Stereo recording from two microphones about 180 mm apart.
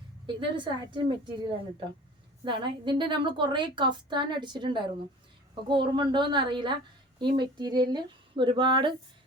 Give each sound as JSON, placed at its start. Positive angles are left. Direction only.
{"t": 0.3, "sound": "a woman's voice", "side_deg": -25}